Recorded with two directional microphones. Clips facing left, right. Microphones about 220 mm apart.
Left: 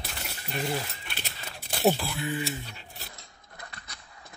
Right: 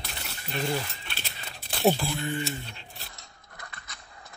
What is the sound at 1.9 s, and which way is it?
Speech, 5° left (ahead or behind).